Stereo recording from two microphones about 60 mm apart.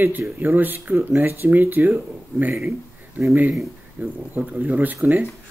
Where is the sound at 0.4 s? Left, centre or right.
Right.